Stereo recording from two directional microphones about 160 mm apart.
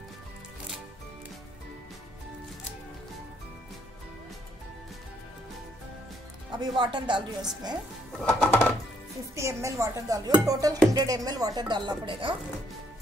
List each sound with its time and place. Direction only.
6.8 s speech: 30° right (ahead or behind)
8.2 s music: 5° left (ahead or behind)
9.3 s speech: 20° right (ahead or behind)